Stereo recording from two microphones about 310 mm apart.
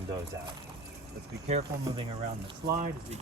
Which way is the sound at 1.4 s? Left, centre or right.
Right.